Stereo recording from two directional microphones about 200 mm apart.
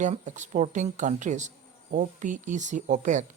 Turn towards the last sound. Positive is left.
turn(degrees=-40)  # may be behind; listen again after turning